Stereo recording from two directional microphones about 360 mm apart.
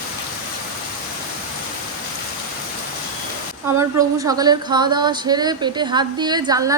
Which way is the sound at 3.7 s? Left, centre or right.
Centre.